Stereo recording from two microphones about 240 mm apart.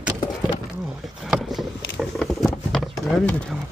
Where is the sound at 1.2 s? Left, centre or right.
Centre.